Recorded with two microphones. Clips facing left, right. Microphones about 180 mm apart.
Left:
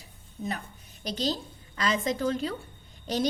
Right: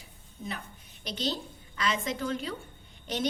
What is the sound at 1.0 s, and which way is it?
A woman's voice, 40° left (ahead or behind).